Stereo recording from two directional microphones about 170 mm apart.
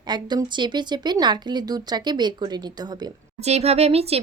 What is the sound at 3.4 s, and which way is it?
Speech, 40° right (ahead or behind).